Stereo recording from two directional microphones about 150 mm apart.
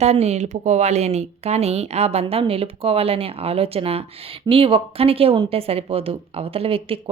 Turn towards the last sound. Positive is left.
turn(degrees=-40)  # may be behind; listen again after turning